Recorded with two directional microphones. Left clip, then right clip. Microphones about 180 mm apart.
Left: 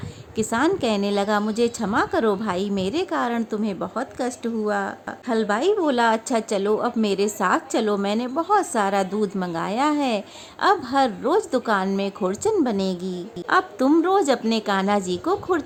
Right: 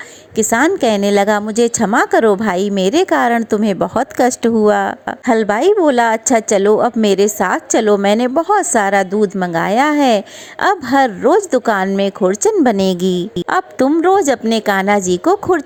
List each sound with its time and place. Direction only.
0.3 s a woman's voice: 35° right (ahead or behind)